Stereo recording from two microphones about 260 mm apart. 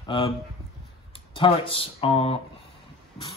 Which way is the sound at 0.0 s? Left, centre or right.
Centre.